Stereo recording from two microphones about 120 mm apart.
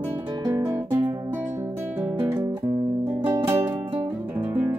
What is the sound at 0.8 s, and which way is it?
Music, 15° right (ahead or behind).